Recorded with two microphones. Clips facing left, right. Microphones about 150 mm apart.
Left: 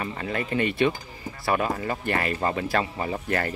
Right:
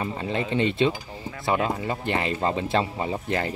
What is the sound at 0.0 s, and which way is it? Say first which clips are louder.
Speech: right 2 dB; 20° right (ahead or behind).